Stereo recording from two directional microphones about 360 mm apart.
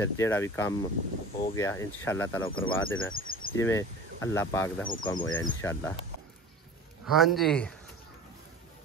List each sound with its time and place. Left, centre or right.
0.0 s speech: centre
2.4 s speech: left
3.2 s cricket: left
3.5 s speech: centre
7.1 s speech: centre